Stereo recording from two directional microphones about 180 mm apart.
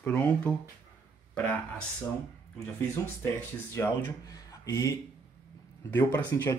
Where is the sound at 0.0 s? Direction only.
10° left (ahead or behind).